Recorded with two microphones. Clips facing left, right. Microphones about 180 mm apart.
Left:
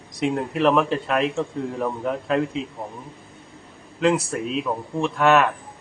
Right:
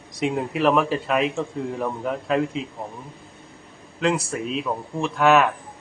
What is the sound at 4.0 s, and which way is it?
A man's voice, centre (ahead or behind).